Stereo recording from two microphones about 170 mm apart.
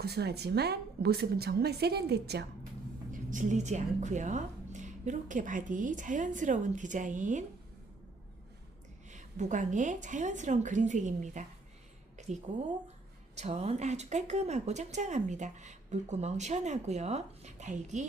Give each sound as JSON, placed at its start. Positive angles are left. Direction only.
{"t": 0.0, "sound": "a woman's voice", "side_deg": -70}
{"t": 3.1, "sound": "speech", "side_deg": -50}
{"t": 9.0, "sound": "speech", "side_deg": -45}
{"t": 12.1, "sound": "a sound", "side_deg": -45}
{"t": 13.3, "sound": "speech", "side_deg": -40}